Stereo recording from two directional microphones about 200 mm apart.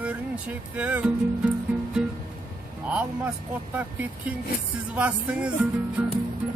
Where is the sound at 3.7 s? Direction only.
10° right (ahead or behind).